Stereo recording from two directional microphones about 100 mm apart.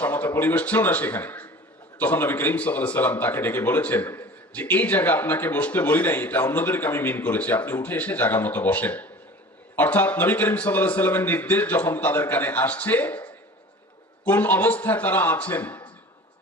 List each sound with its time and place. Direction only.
0.0 s a man's voice: 15° left (ahead or behind)
14.3 s a man's voice: 20° left (ahead or behind)